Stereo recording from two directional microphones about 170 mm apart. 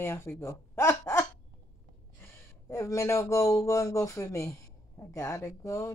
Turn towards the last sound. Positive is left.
turn(degrees=15)  # may be behind; listen again after turning